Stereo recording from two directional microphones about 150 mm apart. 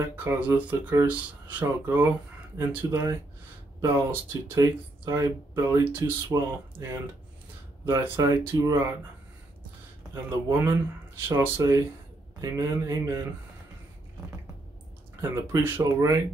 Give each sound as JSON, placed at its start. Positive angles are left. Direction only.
{"t": 0.1, "sound": "speech", "side_deg": -10}
{"t": 11.2, "sound": "speech", "side_deg": -15}
{"t": 15.5, "sound": "speech", "side_deg": -20}